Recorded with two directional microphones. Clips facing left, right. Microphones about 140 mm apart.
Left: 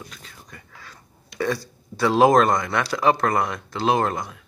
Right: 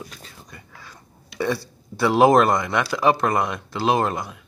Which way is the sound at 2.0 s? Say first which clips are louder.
Right 1 dB; 10° right (ahead or behind).